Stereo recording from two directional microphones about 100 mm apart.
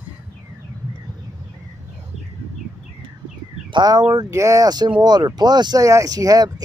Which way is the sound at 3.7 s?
40° right (ahead or behind).